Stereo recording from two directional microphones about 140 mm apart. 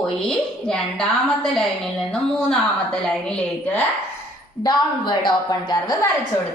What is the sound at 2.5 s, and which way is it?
Speech, 5° left (ahead or behind).